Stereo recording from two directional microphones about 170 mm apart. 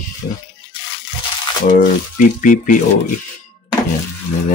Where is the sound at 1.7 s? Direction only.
50° left (ahead or behind).